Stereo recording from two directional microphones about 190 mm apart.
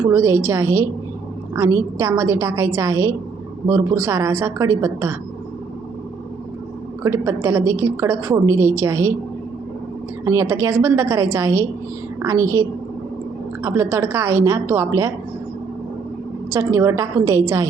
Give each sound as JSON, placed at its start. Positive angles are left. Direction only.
{"t": 0.1, "sound": "a woman's voice", "side_deg": -10}
{"t": 7.0, "sound": "a woman's voice", "side_deg": -15}
{"t": 10.2, "sound": "a woman's voice", "side_deg": -15}
{"t": 16.5, "sound": "a woman's voice", "side_deg": -15}